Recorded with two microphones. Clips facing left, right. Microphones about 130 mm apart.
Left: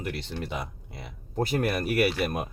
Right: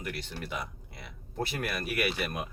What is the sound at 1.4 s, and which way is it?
Speech, 40° left (ahead or behind).